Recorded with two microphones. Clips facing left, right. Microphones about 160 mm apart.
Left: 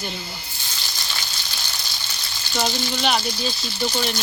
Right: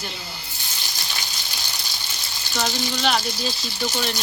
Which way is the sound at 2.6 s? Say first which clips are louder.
Left 1 dB; 5° left (ahead or behind).